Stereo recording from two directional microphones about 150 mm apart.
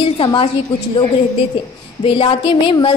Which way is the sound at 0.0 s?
35° left (ahead or behind).